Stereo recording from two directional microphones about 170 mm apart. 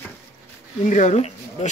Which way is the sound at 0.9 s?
45° left (ahead or behind).